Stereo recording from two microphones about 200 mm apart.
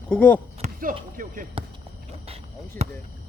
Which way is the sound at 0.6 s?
45° right (ahead or behind).